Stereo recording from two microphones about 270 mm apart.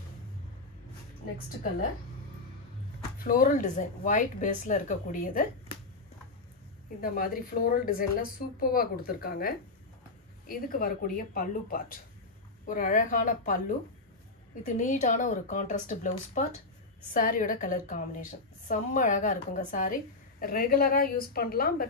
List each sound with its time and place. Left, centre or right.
3.3 s speech: left
7.0 s a woman's voice: left